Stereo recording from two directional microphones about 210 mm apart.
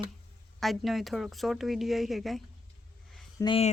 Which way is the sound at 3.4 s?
25° left (ahead or behind).